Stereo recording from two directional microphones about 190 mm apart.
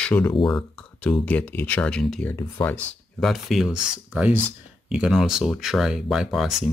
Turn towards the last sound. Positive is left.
turn(degrees=0)  # may be behind; listen again after turning